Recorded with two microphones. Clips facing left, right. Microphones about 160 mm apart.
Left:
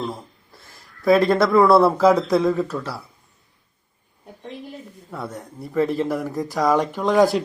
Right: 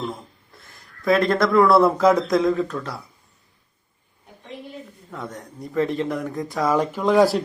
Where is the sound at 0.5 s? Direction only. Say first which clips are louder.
Left 1 dB; centre (ahead or behind).